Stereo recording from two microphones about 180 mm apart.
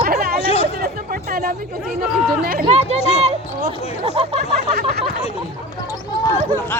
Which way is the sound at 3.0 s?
35° left (ahead or behind).